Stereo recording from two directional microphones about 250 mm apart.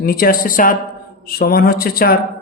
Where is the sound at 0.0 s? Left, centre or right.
Left.